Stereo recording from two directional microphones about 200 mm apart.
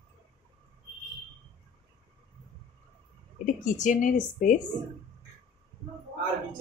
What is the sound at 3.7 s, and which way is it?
Speech, 40° left (ahead or behind).